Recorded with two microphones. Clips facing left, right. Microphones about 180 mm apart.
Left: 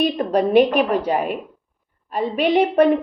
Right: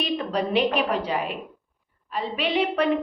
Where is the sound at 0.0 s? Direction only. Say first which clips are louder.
Left 7 dB; 50° left (ahead or behind).